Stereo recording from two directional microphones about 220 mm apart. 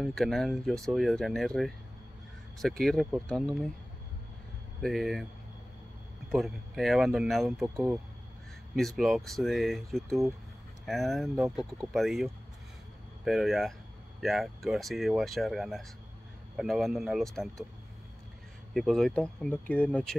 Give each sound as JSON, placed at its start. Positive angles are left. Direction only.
{"t": 0.0, "sound": "speech", "side_deg": 0}
{"t": 4.8, "sound": "speech", "side_deg": 0}
{"t": 6.3, "sound": "speech", "side_deg": 0}
{"t": 7.7, "sound": "speech", "side_deg": -10}
{"t": 8.7, "sound": "speech", "side_deg": 0}
{"t": 18.7, "sound": "speech", "side_deg": 0}